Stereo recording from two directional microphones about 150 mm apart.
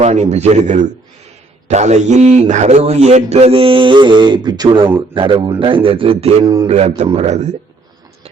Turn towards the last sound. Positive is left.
turn(degrees=-45)  # may be behind; listen again after turning